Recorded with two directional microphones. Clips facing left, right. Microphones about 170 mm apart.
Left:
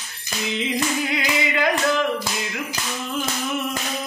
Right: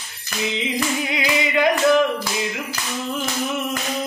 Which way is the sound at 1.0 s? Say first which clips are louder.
Right 1 dB; 20° right (ahead or behind).